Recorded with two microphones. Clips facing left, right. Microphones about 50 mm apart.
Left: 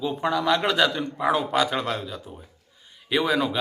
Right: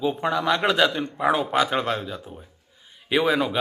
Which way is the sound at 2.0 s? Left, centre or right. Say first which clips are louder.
Right 2 dB; centre.